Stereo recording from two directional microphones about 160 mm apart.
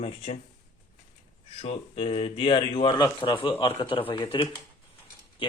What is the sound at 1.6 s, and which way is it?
Speech, 40° left (ahead or behind).